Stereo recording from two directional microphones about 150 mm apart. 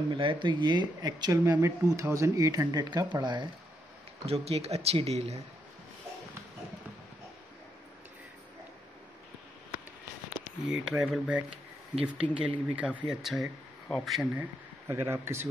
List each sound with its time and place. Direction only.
0.1 s speech: 35° right (ahead or behind)
4.3 s speech: 45° right (ahead or behind)
10.7 s speech: 5° right (ahead or behind)
14.3 s speech: 15° right (ahead or behind)